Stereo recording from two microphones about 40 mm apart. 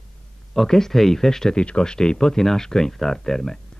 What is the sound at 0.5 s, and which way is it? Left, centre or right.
Speech, centre.